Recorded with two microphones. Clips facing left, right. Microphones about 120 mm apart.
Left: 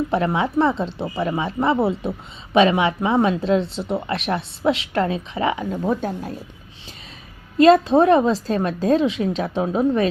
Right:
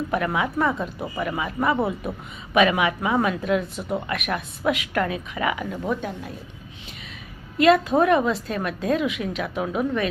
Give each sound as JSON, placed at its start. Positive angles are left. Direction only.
{"t": 0.1, "sound": "a woman's voice", "side_deg": 30}
{"t": 7.6, "sound": "a woman's voice", "side_deg": 30}